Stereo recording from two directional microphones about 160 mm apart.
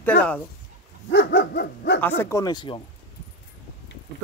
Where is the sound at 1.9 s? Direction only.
10° left (ahead or behind); by 2.8 s 30° left (ahead or behind).